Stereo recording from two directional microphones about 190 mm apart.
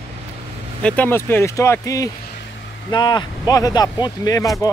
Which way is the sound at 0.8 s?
10° left (ahead or behind).